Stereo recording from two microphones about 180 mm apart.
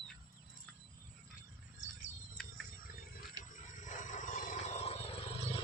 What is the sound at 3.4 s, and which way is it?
Wild animals, 45° left (ahead or behind).